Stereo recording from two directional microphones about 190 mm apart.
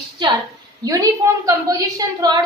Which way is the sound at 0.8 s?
20° right (ahead or behind).